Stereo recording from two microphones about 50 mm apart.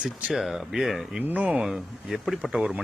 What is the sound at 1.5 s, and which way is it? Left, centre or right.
Speech, centre.